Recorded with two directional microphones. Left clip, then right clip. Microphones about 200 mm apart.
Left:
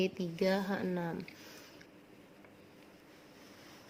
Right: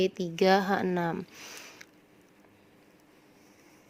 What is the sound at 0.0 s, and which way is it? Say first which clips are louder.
A woman's voice: right 7 dB; 40° right (ahead or behind).